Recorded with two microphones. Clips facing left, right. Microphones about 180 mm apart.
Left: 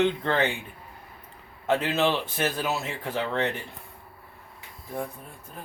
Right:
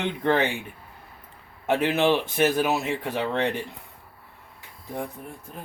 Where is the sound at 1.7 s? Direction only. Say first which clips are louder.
Right 3 dB; 15° right (ahead or behind).